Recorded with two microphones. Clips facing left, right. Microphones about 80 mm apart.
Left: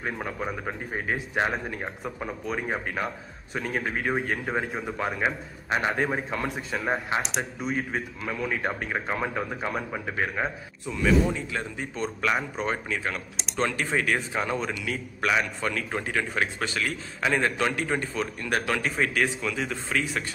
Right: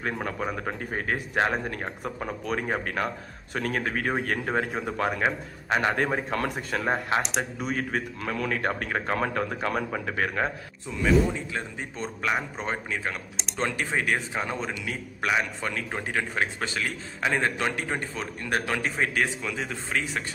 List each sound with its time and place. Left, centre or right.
0.0 s speech: right
2.0 s speech: right
2.4 s a man's voice: right
7.6 s a man's voice: right
11.1 s speech: centre
11.5 s a man's voice: right